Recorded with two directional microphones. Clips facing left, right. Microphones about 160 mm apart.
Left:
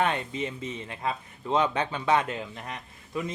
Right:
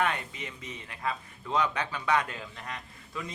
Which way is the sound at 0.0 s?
25° left (ahead or behind).